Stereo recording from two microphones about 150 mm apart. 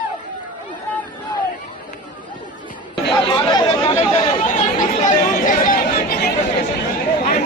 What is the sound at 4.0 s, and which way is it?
Chatter, 50° left (ahead or behind).